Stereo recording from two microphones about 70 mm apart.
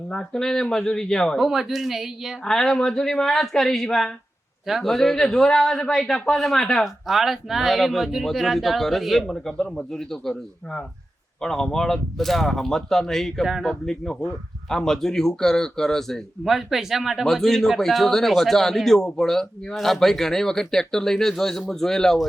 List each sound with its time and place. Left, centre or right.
0.1 s speech: centre
1.5 s speech: centre
2.4 s speech: centre